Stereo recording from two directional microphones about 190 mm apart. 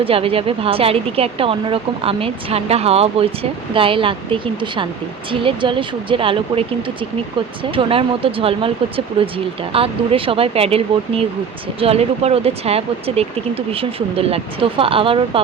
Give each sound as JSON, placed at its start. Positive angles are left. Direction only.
{"t": 0.0, "sound": "a woman's voice", "side_deg": -30}